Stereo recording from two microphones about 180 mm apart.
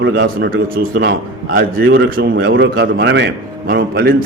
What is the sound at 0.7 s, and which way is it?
Speech, 50° right (ahead or behind).